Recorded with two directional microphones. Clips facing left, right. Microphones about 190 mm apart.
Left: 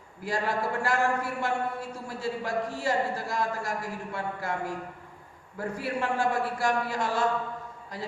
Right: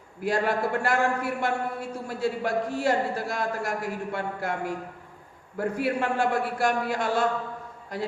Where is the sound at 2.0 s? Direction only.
60° right (ahead or behind).